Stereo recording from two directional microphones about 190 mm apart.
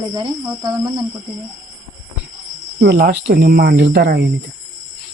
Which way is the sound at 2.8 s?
55° right (ahead or behind).